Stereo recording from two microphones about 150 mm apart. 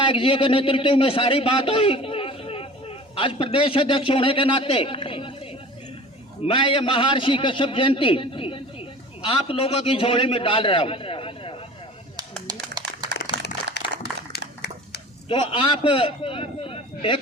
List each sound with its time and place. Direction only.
0.0 s a man's voice: 35° left (ahead or behind)
12.5 s a sound: 25° right (ahead or behind)
13.3 s crumpling: 35° left (ahead or behind)
13.8 s applause: 90° left
14.3 s a sound: 90° left
15.3 s a man's voice: 35° left (ahead or behind)